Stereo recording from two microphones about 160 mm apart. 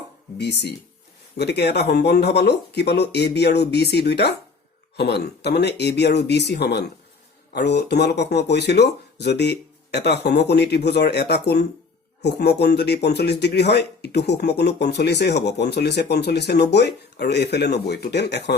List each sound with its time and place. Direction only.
0.3 s a man's voice: 90° left